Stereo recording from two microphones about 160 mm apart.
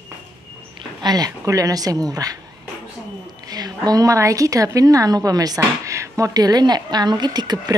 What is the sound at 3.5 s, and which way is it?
A woman's voice, 25° right (ahead or behind).